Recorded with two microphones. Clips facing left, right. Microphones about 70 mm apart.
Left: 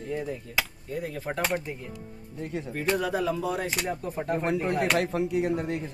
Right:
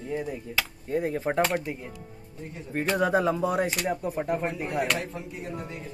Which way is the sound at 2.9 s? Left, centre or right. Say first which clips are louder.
Right 6 dB; right.